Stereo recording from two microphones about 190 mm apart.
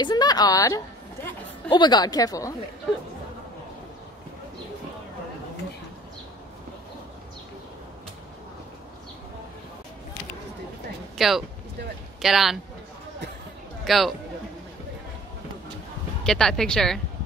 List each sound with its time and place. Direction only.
0.0 s a sound: 20° left (ahead or behind)
1.7 s speech: 25° left (ahead or behind)
11.1 s speech: centre (ahead or behind)
13.8 s speech: centre (ahead or behind)
16.3 s speech: 5° left (ahead or behind)